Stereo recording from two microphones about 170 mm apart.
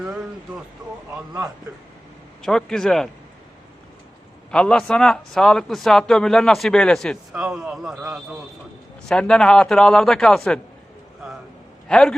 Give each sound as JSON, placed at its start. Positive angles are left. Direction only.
{"t": 0.0, "sound": "speech", "side_deg": -5}
{"t": 1.1, "sound": "speech", "side_deg": -20}
{"t": 2.4, "sound": "a man's voice", "side_deg": 5}
{"t": 4.5, "sound": "a man's voice", "side_deg": 5}
{"t": 11.9, "sound": "a man's voice", "side_deg": 5}